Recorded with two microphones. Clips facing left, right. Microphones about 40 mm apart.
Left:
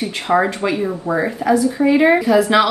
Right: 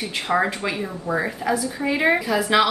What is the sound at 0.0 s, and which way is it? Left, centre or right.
Speech, centre.